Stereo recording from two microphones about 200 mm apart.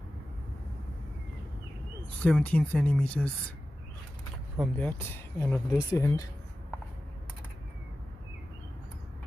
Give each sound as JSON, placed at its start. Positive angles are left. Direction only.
{"t": 2.2, "sound": "speech", "side_deg": 5}
{"t": 4.6, "sound": "speech", "side_deg": 10}